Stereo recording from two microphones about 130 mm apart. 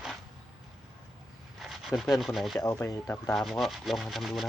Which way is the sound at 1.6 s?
Centre (ahead or behind).